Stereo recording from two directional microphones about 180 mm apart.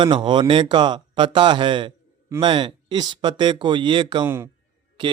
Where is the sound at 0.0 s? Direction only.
25° right (ahead or behind).